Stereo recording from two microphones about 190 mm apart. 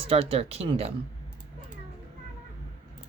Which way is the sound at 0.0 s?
30° right (ahead or behind).